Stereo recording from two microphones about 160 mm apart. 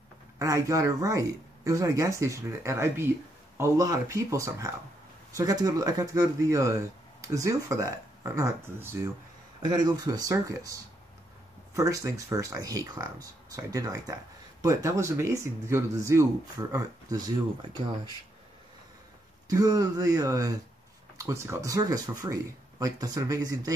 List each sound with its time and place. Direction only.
0.4 s speech: 20° right (ahead or behind)
9.6 s speech: 25° right (ahead or behind)
19.4 s speech: 20° right (ahead or behind)